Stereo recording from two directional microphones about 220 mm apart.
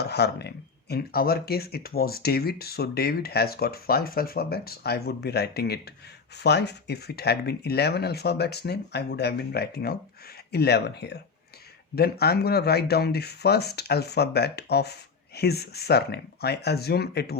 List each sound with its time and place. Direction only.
0.0 s speech: 50° left (ahead or behind)